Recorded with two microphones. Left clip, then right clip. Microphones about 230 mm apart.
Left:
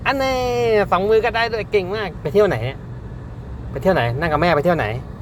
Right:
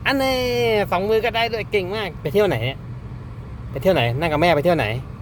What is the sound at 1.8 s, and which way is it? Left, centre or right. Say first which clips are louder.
Speech: left 3 dB; centre.